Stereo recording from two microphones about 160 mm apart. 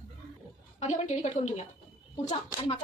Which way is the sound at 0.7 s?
45° left (ahead or behind).